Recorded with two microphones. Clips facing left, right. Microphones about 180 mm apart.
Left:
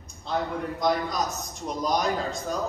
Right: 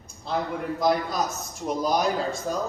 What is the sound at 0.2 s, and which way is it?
A man's voice, centre (ahead or behind).